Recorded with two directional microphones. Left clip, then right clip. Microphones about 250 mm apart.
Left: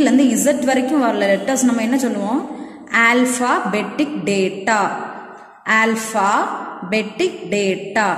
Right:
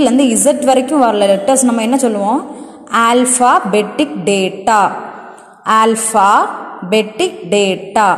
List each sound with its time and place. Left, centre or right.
0.0 s a woman's voice: right